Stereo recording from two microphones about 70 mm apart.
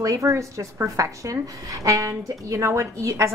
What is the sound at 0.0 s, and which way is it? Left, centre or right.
A woman's voice, right.